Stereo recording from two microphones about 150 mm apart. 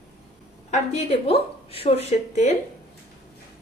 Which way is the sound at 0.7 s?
40° left (ahead or behind).